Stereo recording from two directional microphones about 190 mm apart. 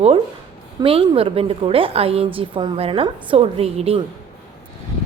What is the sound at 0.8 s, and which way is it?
A woman's voice, 30° right (ahead or behind).